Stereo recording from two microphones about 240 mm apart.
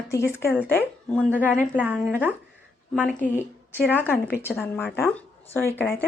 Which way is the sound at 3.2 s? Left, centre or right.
Left.